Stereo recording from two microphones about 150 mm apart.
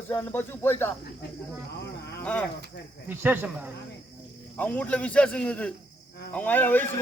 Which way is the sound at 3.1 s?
10° right (ahead or behind).